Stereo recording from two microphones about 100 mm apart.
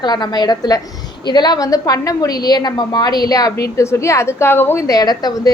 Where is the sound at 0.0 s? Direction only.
45° left (ahead or behind); by 4.8 s 20° left (ahead or behind).